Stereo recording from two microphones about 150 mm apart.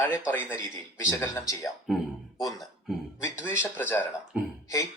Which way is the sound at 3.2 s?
20° left (ahead or behind).